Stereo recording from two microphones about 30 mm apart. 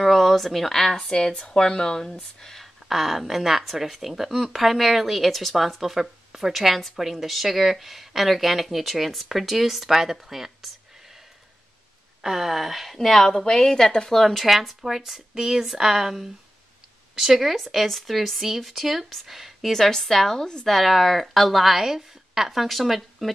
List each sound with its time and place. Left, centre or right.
0.0 s a sound: centre
0.7 s a woman's voice: centre
1.0 s speech: left
2.6 s speech: centre
12.2 s speech: centre
13.0 s a woman's voice: centre
14.8 s speech: centre
17.8 s speech: centre
19.7 s a woman's voice: centre
21.8 s speech: centre